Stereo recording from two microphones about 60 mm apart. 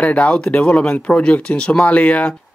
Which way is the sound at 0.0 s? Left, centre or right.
Left.